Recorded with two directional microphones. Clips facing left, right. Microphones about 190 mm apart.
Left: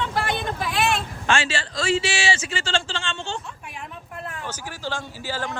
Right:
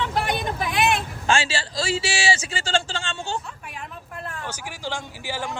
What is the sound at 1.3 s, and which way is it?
Speech, 30° right (ahead or behind).